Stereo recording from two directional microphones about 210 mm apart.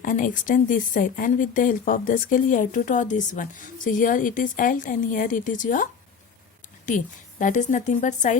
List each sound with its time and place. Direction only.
0.0 s speech: 40° left (ahead or behind)